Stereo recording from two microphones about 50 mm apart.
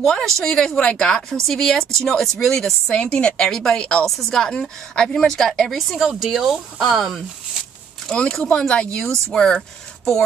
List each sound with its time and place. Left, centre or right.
0.0 s speech: centre
3.0 s a woman's voice: left; by 7.2 s centre
8.1 s a woman's voice: centre